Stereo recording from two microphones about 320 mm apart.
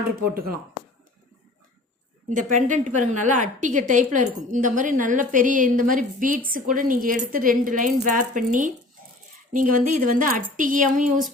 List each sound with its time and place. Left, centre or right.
2.3 s a woman's voice: right